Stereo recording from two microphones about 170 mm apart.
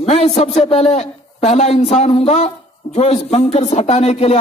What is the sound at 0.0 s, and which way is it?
Speech, 40° left (ahead or behind).